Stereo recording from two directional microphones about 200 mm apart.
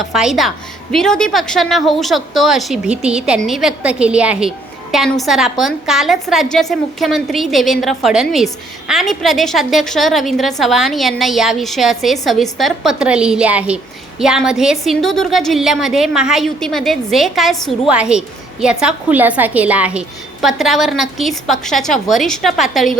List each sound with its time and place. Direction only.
0.0 s a woman's voice: centre (ahead or behind)